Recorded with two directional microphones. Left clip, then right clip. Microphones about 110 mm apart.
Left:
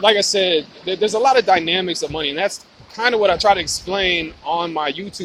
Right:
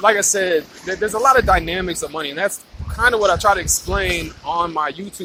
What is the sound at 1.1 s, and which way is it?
Speech, 50° left (ahead or behind).